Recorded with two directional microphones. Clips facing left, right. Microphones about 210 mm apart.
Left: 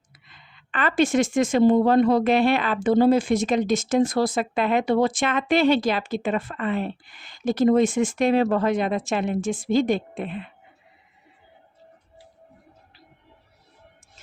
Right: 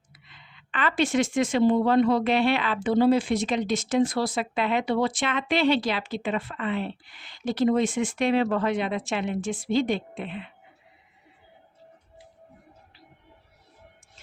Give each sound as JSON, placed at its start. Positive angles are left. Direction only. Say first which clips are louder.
{"t": 0.1, "sound": "speech", "louder": "even", "side_deg": 45}